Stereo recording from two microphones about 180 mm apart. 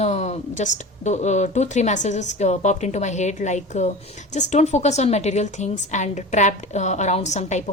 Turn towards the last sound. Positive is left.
turn(degrees=40)  # may be behind; listen again after turning